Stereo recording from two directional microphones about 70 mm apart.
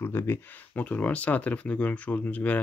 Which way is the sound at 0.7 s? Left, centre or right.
Left.